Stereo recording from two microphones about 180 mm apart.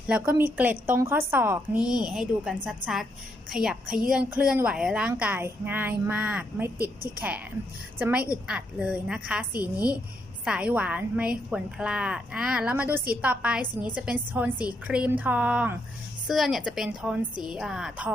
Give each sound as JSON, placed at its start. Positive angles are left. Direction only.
{"t": 0.1, "sound": "a woman's voice", "side_deg": -15}
{"t": 6.7, "sound": "a woman's voice", "side_deg": -55}
{"t": 7.2, "sound": "a woman's voice", "side_deg": -10}